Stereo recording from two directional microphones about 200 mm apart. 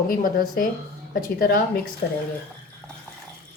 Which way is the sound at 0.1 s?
45° left (ahead or behind).